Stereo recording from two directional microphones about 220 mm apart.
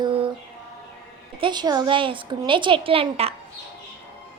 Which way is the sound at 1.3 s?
20° right (ahead or behind).